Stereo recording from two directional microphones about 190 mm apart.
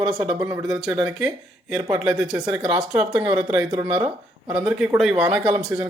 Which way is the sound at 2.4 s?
25° right (ahead or behind).